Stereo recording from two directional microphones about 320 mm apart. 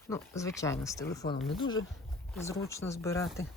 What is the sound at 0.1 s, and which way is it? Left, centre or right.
Speech, centre.